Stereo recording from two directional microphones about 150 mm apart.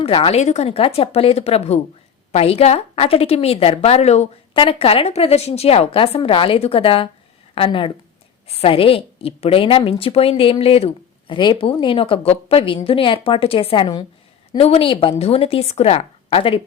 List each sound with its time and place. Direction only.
0.0 s a woman's voice: 40° left (ahead or behind)